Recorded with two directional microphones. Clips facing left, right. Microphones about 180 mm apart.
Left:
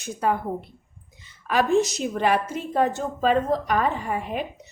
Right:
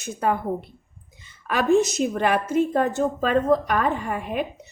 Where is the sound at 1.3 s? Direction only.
50° right (ahead or behind).